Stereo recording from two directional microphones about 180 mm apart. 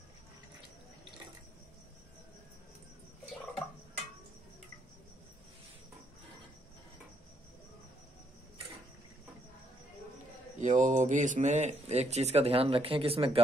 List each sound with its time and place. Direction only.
10.6 s speech: 45° right (ahead or behind)